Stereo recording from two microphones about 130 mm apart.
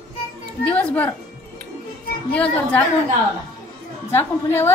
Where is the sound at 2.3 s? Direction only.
10° left (ahead or behind).